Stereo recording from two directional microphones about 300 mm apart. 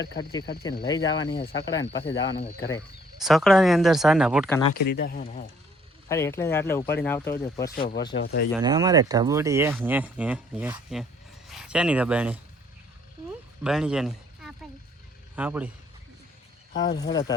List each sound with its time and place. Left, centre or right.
0.2 s speech: centre
1.1 s speech: left
2.4 s speech: centre
3.2 s speech: centre
4.9 s speech: left
6.1 s speech: centre
8.1 s speech: left
8.5 s speech: centre
13.7 s speech: centre
16.8 s speech: centre